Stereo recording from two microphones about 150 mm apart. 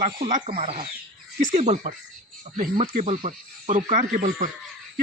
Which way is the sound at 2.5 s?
40° right (ahead or behind).